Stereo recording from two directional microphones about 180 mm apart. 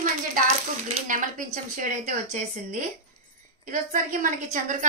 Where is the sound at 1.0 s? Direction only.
45° right (ahead or behind).